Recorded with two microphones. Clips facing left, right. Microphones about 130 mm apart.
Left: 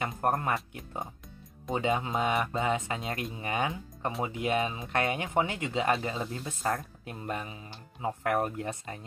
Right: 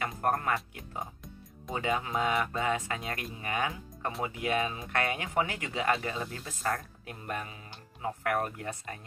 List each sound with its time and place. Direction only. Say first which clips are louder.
0.2 s speech: left 1 dB; 25° left (ahead or behind)
1.7 s speech: left 2 dB; 25° left (ahead or behind)